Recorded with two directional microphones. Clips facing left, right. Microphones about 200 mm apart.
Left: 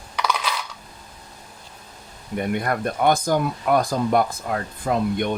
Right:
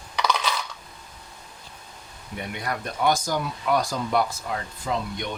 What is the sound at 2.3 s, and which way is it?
Speech, 50° left (ahead or behind).